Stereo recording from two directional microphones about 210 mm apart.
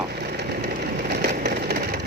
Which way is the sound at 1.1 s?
50° right (ahead or behind).